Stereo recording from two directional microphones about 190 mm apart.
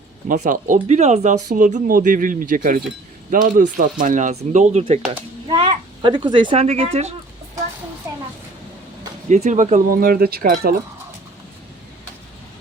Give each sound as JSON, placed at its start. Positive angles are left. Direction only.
{"t": 0.3, "sound": "speech", "side_deg": -45}
{"t": 8.1, "sound": "a sound", "side_deg": -15}
{"t": 9.3, "sound": "speech", "side_deg": -40}